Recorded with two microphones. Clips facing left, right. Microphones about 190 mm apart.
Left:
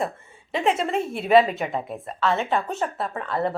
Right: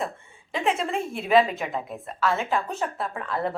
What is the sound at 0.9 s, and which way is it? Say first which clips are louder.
Speech: left 3 dB; 5° left (ahead or behind).